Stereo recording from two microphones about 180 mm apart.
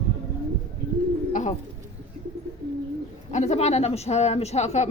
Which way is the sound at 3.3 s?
40° left (ahead or behind).